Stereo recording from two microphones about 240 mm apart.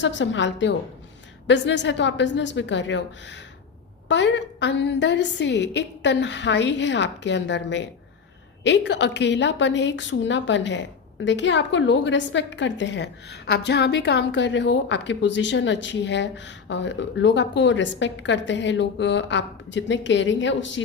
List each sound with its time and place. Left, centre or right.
0.0 s a woman's voice: left